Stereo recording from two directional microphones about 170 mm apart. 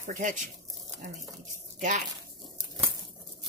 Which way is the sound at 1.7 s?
50° right (ahead or behind).